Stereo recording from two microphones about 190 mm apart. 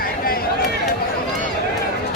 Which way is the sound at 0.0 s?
50° left (ahead or behind).